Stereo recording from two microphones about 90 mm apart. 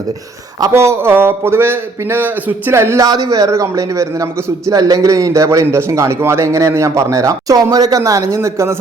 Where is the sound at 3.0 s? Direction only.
40° right (ahead or behind).